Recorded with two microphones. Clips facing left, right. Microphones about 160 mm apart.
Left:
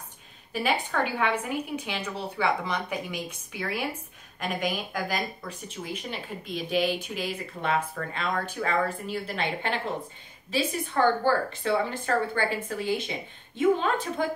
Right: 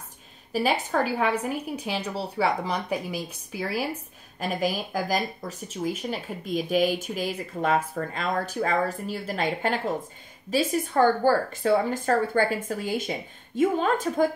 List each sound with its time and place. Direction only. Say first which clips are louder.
0.5 s a woman's voice: right 3 dB; 35° right (ahead or behind)